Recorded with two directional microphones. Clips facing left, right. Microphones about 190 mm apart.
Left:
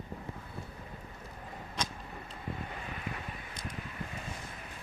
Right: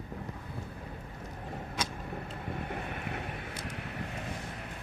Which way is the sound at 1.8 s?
5° right (ahead or behind).